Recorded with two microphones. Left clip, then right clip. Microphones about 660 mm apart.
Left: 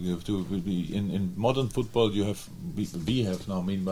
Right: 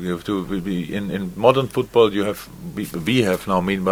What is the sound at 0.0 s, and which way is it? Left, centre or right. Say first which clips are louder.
A man's voice: right 8 dB; right.